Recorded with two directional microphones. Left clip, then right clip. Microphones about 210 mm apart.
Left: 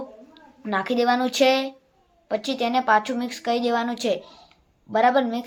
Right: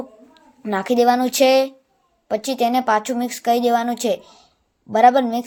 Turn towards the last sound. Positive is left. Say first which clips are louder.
# right 6 dB
turn(degrees=-45)  # may be behind; listen again after turning